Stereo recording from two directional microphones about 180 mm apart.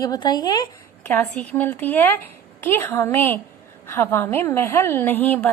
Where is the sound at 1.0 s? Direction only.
10° left (ahead or behind).